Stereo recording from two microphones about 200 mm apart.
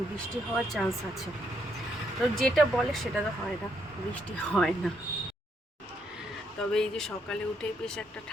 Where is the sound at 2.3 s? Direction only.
Centre (ahead or behind).